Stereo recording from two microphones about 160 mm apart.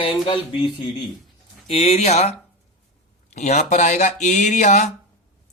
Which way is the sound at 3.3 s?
45° left (ahead or behind).